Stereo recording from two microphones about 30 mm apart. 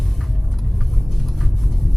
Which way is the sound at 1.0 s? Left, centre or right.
Centre.